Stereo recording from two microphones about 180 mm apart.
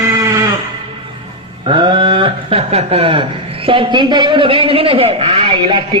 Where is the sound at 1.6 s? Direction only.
25° right (ahead or behind).